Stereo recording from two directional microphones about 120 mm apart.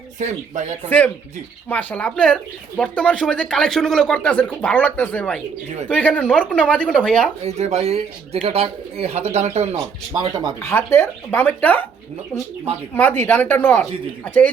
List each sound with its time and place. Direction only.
0.2 s speech: 85° right
0.9 s speech: 15° left (ahead or behind)
7.4 s speech: 65° right (ahead or behind)
10.1 s speech: 35° right (ahead or behind)
10.6 s speech: 20° left (ahead or behind)
12.9 s speech: 15° left (ahead or behind)